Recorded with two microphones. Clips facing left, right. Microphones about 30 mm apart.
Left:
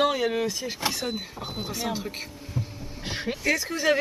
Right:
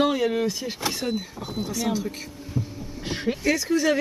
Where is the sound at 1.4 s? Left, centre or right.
Left.